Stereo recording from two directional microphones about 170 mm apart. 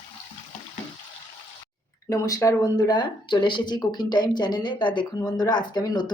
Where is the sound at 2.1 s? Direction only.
20° left (ahead or behind).